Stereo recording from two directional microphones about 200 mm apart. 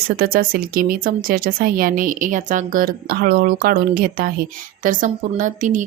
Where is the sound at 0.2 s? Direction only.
45° right (ahead or behind).